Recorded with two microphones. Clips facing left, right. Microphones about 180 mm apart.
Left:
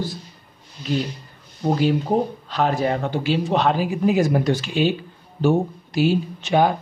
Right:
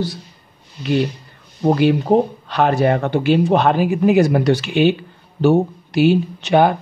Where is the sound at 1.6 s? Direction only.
65° right (ahead or behind).